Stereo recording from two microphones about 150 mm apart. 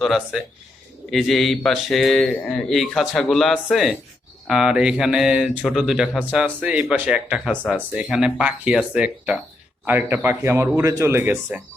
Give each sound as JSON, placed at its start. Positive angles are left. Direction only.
{"t": 0.0, "sound": "speech", "side_deg": 0}